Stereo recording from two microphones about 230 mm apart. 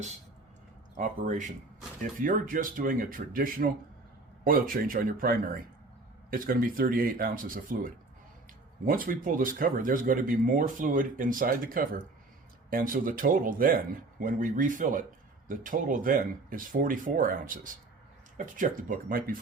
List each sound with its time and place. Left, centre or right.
0.9 s speech: right
8.9 s speech: right